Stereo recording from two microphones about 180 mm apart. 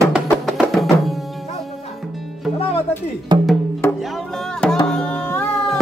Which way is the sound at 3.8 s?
15° left (ahead or behind).